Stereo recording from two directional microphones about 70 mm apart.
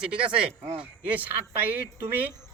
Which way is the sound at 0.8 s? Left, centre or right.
Right.